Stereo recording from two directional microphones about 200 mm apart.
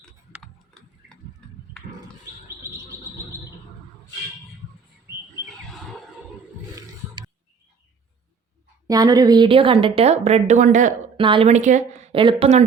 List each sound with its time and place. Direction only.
1.7 s horse: 5° left (ahead or behind)
8.9 s a woman's voice: 20° right (ahead or behind); by 10.9 s 40° right (ahead or behind)
11.2 s a woman's voice: 25° right (ahead or behind)